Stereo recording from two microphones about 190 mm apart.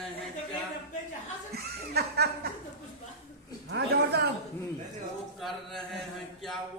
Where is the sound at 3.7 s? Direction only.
60° right (ahead or behind).